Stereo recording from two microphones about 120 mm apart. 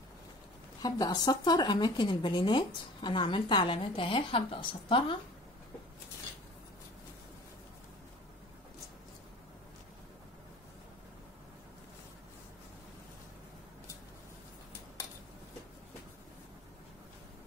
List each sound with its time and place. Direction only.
0.8 s speech: 30° left (ahead or behind)